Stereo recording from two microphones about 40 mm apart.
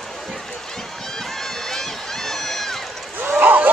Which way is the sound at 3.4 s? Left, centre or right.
Right.